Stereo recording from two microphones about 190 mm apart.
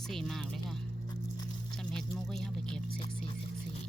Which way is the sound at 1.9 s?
5° left (ahead or behind).